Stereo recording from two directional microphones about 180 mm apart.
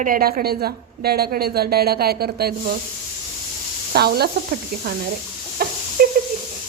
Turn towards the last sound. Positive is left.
turn(degrees=-55)  # may be behind; listen again after turning